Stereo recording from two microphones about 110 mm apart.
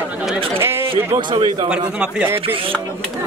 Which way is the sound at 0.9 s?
55° right (ahead or behind).